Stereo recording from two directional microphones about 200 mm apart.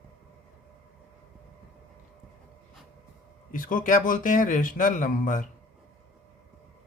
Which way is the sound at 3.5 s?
45° left (ahead or behind).